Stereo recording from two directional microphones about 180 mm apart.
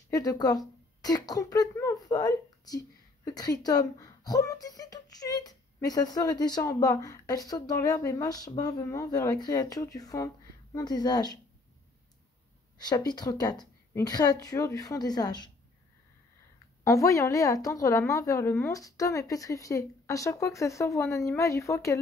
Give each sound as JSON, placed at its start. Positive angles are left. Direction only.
{"t": 0.1, "sound": "speech", "side_deg": 20}
{"t": 12.7, "sound": "speech", "side_deg": 20}
{"t": 16.8, "sound": "a woman's voice", "side_deg": 15}